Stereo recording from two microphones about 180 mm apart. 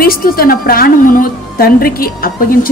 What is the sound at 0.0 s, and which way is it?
A woman's voice, 55° left (ahead or behind).